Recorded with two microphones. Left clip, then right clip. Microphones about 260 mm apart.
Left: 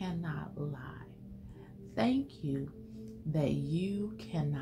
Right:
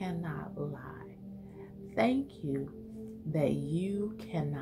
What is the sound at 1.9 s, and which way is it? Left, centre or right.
Speech, centre.